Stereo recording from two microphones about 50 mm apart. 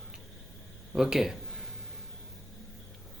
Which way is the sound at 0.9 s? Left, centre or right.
Centre.